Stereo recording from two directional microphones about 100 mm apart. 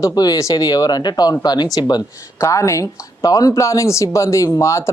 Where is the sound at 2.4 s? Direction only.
30° left (ahead or behind).